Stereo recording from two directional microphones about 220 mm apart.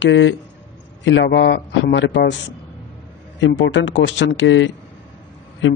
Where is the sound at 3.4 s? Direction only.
55° left (ahead or behind).